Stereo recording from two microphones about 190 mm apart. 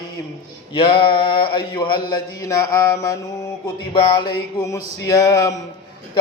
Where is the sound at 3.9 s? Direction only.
25° left (ahead or behind).